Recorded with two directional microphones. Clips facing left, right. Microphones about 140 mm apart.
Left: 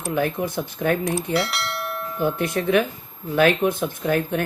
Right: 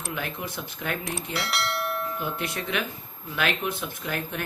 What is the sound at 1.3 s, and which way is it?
Bell, centre (ahead or behind).